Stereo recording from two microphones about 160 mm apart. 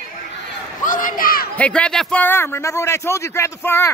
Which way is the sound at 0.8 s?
55° left (ahead or behind).